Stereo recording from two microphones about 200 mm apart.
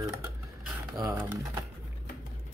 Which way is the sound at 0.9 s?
15° right (ahead or behind).